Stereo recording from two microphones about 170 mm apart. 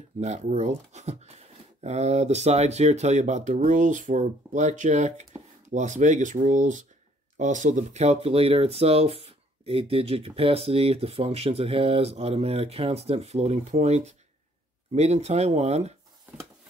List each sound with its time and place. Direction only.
0.2 s speech: 40° right (ahead or behind)